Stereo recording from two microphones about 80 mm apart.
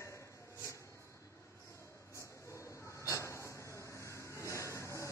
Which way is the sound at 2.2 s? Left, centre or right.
Left.